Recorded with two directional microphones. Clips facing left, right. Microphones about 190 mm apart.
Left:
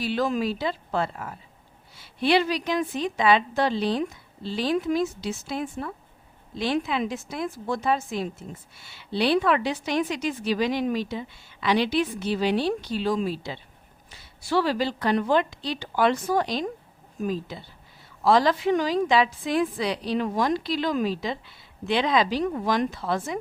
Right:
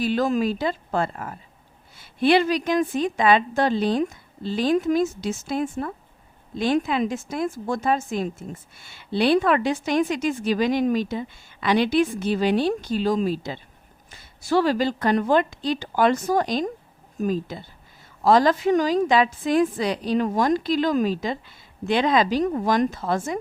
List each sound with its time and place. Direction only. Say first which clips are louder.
0.0 s a woman's voice: right 3 dB; 45° right (ahead or behind)